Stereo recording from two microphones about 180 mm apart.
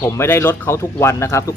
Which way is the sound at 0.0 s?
10° left (ahead or behind).